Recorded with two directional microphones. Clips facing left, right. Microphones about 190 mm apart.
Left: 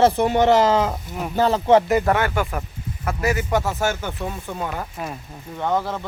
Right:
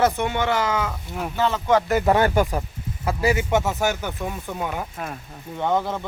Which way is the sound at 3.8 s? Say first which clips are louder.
Even; 10° right (ahead or behind).